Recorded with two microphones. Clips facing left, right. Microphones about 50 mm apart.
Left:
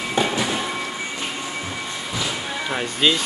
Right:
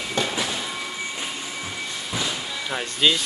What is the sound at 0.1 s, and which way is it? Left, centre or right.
Train, centre.